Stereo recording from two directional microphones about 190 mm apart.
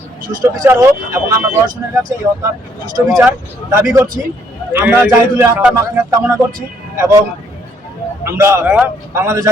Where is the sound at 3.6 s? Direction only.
15° right (ahead or behind).